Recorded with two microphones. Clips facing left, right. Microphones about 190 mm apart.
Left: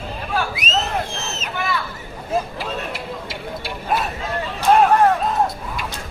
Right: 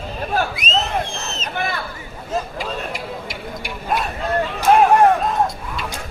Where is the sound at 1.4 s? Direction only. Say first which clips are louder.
Even; 45° right (ahead or behind).